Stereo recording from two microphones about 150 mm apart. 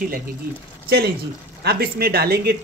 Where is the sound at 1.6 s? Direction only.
90° right.